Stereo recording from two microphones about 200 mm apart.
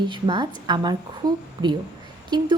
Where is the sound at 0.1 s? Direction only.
25° right (ahead or behind).